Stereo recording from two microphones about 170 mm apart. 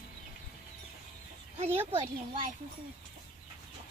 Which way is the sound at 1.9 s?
30° right (ahead or behind).